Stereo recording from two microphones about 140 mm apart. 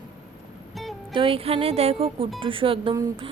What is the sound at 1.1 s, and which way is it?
Speech, 40° right (ahead or behind).